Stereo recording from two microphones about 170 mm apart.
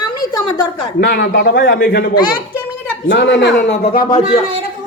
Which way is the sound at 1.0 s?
90° left.